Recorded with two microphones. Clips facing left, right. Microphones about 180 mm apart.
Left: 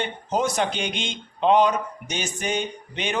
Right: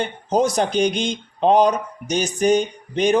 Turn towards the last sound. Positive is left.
turn(degrees=-40)  # may be behind; listen again after turning